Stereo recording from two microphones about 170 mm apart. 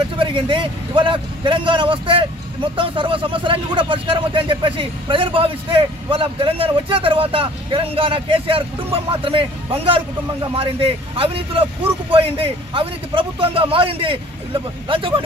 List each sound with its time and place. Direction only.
0.1 s speech: 30° right (ahead or behind)